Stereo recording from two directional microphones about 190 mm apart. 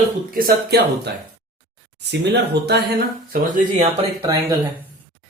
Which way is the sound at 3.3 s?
45° right (ahead or behind).